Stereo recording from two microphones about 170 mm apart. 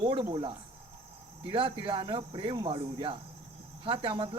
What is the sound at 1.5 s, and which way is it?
Speech, 30° right (ahead or behind).